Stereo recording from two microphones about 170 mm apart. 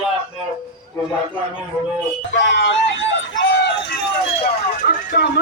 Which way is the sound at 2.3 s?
90° left.